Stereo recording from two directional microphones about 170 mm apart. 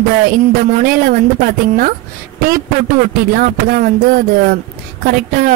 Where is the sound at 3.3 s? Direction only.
60° right (ahead or behind).